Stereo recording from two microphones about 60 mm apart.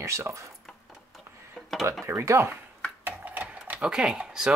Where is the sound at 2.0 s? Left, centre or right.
Right.